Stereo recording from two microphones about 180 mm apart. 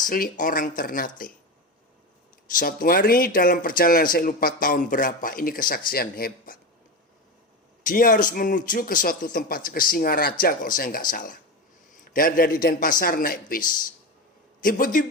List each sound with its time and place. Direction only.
0.1 s speech: 50° left (ahead or behind)
2.6 s speech: 50° left (ahead or behind)
7.9 s speech: 50° left (ahead or behind)
11.9 s a sound: 50° left (ahead or behind)
12.6 s speech: 50° left (ahead or behind)